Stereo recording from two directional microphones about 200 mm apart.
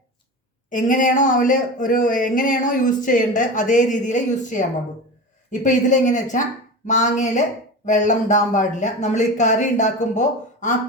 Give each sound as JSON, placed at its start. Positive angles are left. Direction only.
{"t": 0.7, "sound": "speech", "side_deg": 40}